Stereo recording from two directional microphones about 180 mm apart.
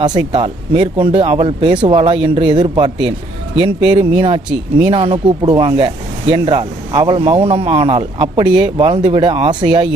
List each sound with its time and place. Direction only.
0.0 s speech: 25° right (ahead or behind)